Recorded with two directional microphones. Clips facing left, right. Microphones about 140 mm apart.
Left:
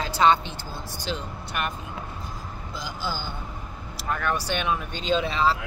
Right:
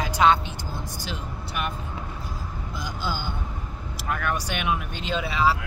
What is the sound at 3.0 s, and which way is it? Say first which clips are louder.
Speech: right 2 dB; 15° right (ahead or behind).